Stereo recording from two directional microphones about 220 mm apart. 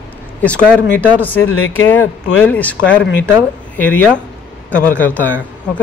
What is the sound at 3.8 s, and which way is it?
Speech, 5° left (ahead or behind).